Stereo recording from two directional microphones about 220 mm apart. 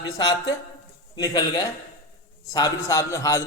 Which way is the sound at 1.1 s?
15° left (ahead or behind).